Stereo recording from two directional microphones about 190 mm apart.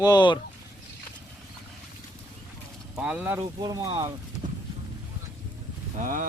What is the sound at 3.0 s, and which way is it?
Speech, 5° right (ahead or behind).